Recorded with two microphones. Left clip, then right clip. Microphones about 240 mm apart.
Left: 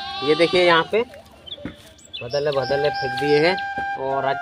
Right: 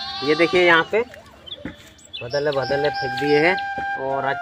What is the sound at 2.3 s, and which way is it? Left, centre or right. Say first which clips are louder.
Speech: even; centre.